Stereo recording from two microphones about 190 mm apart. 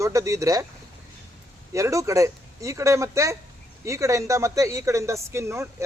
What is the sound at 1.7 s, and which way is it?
Speech, 15° right (ahead or behind).